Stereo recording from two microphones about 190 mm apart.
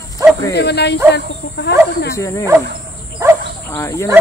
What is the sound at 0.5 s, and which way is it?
Speech, 60° left (ahead or behind).